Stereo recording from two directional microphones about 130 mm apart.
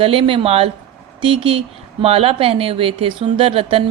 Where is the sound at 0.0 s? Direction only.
45° right (ahead or behind).